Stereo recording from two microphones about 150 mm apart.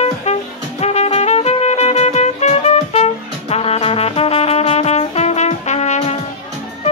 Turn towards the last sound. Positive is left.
turn(degrees=50)  # may be behind; listen again after turning